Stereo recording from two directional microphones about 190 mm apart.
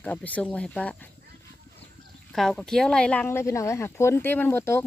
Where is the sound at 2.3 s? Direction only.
Centre (ahead or behind).